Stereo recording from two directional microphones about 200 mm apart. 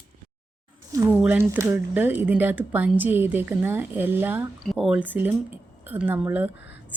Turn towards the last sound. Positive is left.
turn(degrees=60)  # may be behind; listen again after turning